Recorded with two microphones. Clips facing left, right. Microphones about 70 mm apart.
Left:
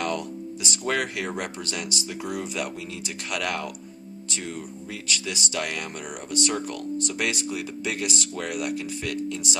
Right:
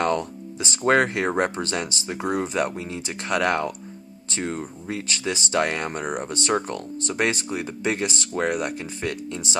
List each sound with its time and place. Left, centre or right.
0.0 s speech: right